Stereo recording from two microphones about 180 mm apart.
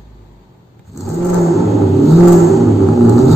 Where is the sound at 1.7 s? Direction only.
Centre (ahead or behind).